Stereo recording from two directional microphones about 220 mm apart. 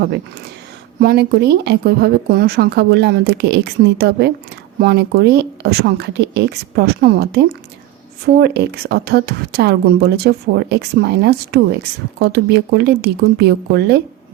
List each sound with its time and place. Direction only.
0.9 s speech: 45° right (ahead or behind)